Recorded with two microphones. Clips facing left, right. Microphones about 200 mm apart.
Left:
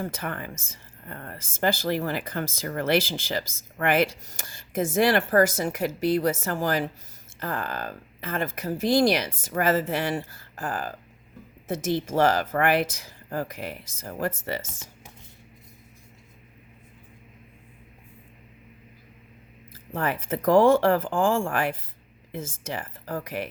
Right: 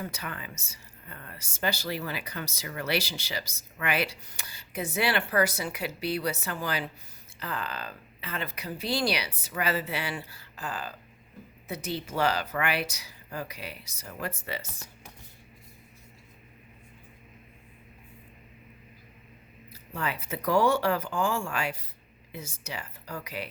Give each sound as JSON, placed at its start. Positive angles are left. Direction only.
{"t": 0.0, "sound": "speech", "side_deg": 50}
{"t": 19.7, "sound": "speech", "side_deg": 50}